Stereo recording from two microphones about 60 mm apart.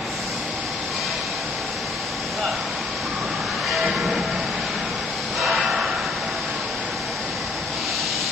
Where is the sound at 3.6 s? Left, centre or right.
Centre.